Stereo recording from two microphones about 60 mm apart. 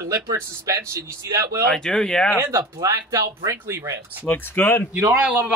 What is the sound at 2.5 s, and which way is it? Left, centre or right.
Speech, right.